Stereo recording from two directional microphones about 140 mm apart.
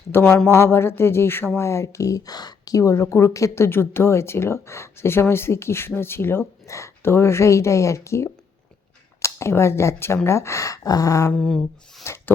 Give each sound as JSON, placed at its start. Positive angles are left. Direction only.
{"t": 0.1, "sound": "a woman's voice", "side_deg": 15}
{"t": 11.3, "sound": "a sound", "side_deg": 5}
{"t": 12.0, "sound": "rub", "side_deg": 20}